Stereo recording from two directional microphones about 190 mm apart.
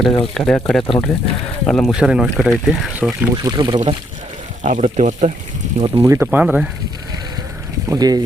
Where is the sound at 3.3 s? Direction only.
20° right (ahead or behind).